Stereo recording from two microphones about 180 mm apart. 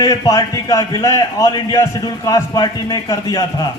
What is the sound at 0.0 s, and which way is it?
A man's voice, 20° left (ahead or behind).